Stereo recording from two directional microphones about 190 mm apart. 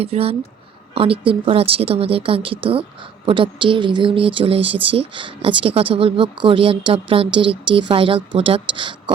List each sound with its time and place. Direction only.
0.0 s a woman's voice: 30° right (ahead or behind)